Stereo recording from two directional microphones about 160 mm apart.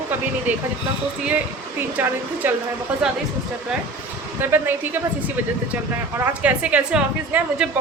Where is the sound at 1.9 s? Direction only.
15° right (ahead or behind).